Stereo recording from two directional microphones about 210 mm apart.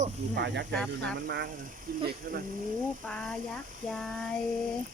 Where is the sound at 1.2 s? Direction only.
50° right (ahead or behind).